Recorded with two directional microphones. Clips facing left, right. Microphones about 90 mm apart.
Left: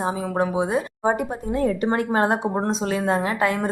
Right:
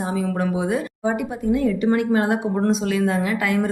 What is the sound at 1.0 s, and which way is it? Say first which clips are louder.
A woman's voice: right 3 dB; 40° left (ahead or behind).